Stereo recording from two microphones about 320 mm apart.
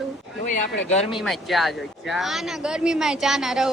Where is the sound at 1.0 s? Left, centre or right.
Centre.